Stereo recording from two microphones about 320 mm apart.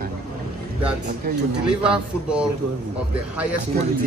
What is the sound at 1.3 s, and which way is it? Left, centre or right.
Speech, right.